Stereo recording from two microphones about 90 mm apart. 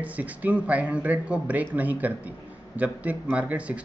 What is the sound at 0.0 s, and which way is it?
Speech, 15° right (ahead or behind).